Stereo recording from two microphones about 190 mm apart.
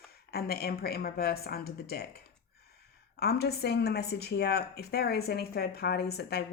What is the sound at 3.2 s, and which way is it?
A woman's voice, 60° left (ahead or behind).